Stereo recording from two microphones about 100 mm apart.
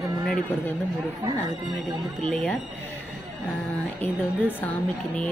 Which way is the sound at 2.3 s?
15° left (ahead or behind).